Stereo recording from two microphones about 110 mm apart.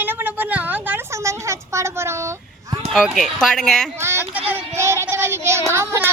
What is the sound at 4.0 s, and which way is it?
Speech, 20° right (ahead or behind).